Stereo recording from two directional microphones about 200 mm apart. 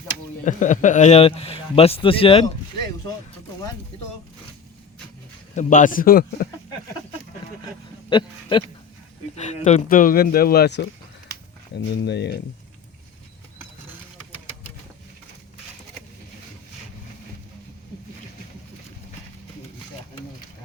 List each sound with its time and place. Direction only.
0.4 s speech: 40° left (ahead or behind); by 3.2 s 20° left (ahead or behind)
5.5 s speech: 40° left (ahead or behind)
8.1 s speech: 25° left (ahead or behind)
9.3 s speech: 35° left (ahead or behind); by 10.8 s 55° left (ahead or behind)
11.9 s speech: 55° left (ahead or behind)